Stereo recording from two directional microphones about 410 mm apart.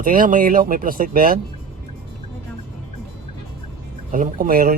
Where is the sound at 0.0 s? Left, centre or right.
Centre.